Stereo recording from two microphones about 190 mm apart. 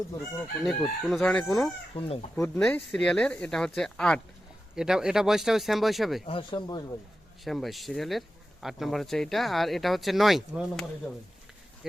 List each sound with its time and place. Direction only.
0.6 s speech: centre (ahead or behind)
2.0 s speech: 30° left (ahead or behind)
2.3 s speech: 5° left (ahead or behind)
6.2 s speech: 25° left (ahead or behind)
7.4 s speech: centre (ahead or behind)